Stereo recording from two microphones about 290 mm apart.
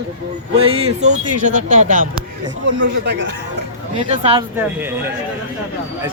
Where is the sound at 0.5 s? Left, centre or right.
Centre.